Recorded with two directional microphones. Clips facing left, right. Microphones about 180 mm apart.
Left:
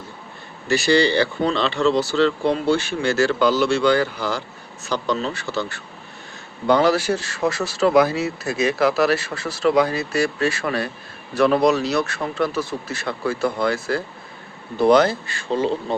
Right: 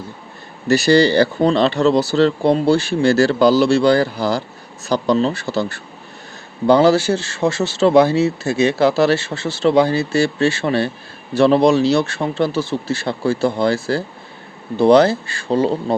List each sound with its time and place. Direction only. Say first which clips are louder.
0.7 s speech: right 5 dB; 40° right (ahead or behind)